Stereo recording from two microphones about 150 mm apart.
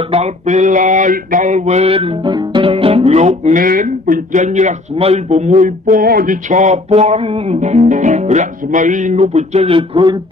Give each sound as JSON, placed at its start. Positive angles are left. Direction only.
{"t": 0.1, "sound": "mantra", "side_deg": -50}